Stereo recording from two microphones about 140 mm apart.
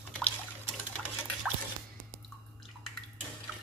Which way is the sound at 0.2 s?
5° left (ahead or behind).